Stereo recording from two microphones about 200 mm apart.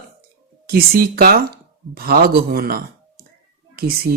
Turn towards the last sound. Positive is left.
turn(degrees=-50)  # may be behind; listen again after turning